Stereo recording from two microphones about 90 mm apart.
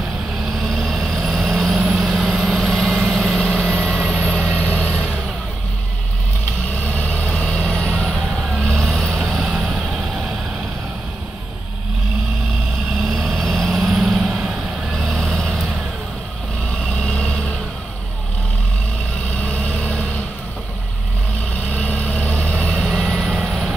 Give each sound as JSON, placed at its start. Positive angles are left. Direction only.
{"t": 0.7, "sound": "vehicle", "side_deg": 0}
{"t": 6.8, "sound": "vehicle", "side_deg": 15}
{"t": 13.1, "sound": "vehicle", "side_deg": 0}
{"t": 17.0, "sound": "vehicle", "side_deg": 10}
{"t": 19.4, "sound": "vehicle", "side_deg": 15}
{"t": 21.6, "sound": "vehicle", "side_deg": 15}